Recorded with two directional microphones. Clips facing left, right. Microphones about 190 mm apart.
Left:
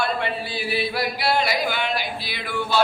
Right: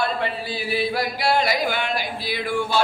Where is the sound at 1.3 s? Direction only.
45° right (ahead or behind).